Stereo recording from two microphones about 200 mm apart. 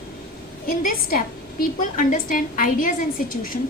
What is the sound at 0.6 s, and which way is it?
A woman's voice, 45° left (ahead or behind).